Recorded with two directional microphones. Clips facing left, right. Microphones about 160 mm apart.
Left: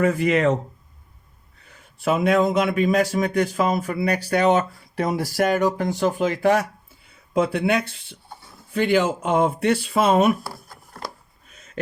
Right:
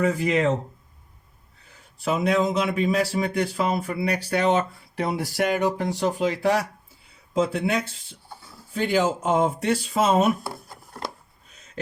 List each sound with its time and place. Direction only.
0.0 s speech: 60° left (ahead or behind)
2.0 s speech: 55° left (ahead or behind)
4.9 s speech: 40° left (ahead or behind)
7.3 s speech: 65° left (ahead or behind)